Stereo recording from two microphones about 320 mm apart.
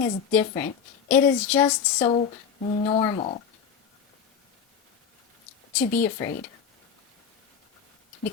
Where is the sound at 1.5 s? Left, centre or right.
Centre.